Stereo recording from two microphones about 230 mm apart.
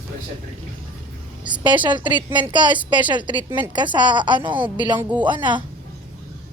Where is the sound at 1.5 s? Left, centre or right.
Centre.